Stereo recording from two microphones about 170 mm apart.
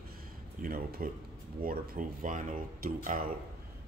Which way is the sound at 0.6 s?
60° right (ahead or behind).